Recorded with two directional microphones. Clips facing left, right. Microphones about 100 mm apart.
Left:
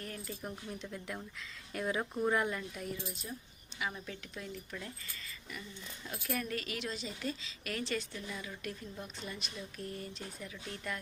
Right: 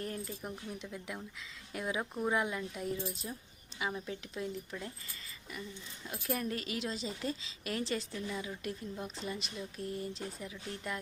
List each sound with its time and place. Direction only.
0.3 s speech: 15° right (ahead or behind)
2.8 s speech: 30° right (ahead or behind)
6.1 s speech: 25° right (ahead or behind)